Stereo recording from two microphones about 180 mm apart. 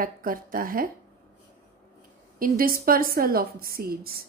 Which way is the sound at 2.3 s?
55° right (ahead or behind).